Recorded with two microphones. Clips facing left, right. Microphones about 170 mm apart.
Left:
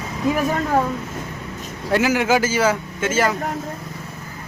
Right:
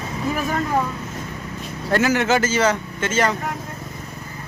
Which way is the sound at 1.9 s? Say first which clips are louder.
Left 1 dB; 10° left (ahead or behind).